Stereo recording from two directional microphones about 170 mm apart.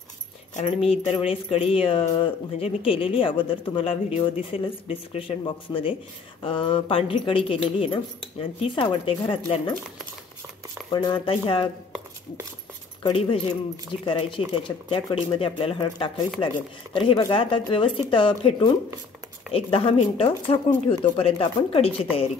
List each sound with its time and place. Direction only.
0.6 s speech: 35° left (ahead or behind)
10.9 s speech: 30° left (ahead or behind)
13.0 s speech: 35° left (ahead or behind)